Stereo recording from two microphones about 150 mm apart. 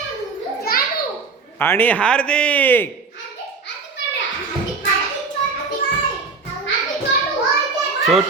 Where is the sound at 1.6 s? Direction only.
15° left (ahead or behind).